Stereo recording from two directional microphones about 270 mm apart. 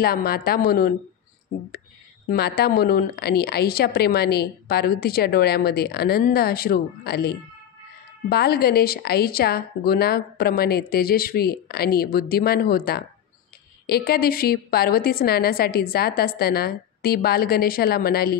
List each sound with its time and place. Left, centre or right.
0.0 s a woman's voice: left
2.2 s a woman's voice: left